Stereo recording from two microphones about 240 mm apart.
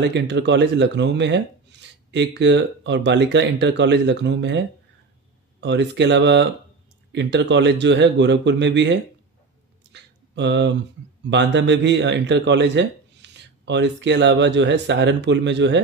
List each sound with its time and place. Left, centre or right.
0.0 s speech: right
9.9 s a sound: right
11.2 s speech: right